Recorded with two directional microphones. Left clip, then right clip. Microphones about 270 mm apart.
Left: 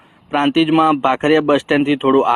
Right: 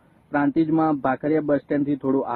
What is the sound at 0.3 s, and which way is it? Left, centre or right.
Speech, centre.